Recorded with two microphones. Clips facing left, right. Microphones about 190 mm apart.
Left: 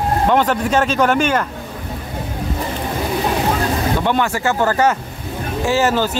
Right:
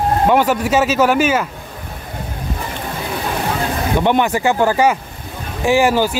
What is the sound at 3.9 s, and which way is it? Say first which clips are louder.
Speech: right 3 dB; 20° right (ahead or behind).